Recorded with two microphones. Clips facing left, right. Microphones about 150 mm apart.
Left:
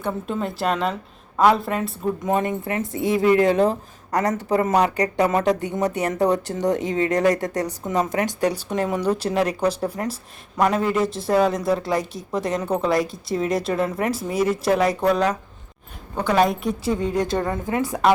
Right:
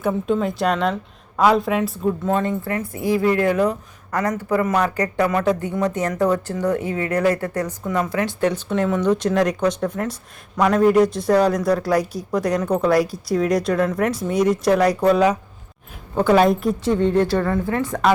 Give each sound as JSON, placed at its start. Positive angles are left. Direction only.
{"t": 0.0, "sound": "speech", "side_deg": 0}
{"t": 2.2, "sound": "a woman's voice", "side_deg": 15}
{"t": 7.4, "sound": "a woman's voice", "side_deg": 35}
{"t": 7.9, "sound": "a woman's voice", "side_deg": 20}
{"t": 16.8, "sound": "a woman's voice", "side_deg": 10}